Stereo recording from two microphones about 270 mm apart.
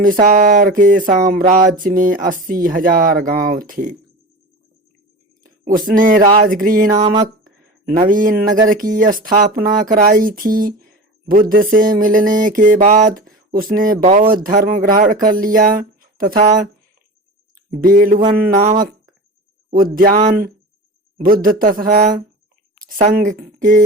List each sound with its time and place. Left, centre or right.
0.0 s a sound: right
1.8 s speech: right
5.4 s speech: right
6.9 s speech: centre
7.9 s speech: right
17.7 s speech: right
18.5 s a sound: right
19.7 s speech: right
22.8 s a sound: right